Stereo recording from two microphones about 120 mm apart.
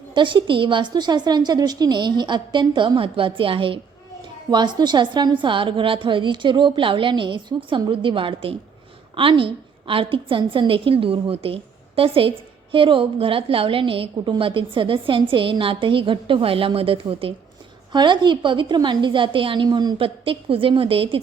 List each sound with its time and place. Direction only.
0.1 s a woman's voice: 40° right (ahead or behind)
4.5 s a woman's voice: 40° right (ahead or behind)
17.9 s a woman's voice: 40° right (ahead or behind)
20.0 s a woman's voice: 50° right (ahead or behind)